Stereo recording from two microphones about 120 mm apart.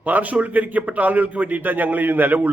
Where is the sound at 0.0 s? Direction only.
15° right (ahead or behind).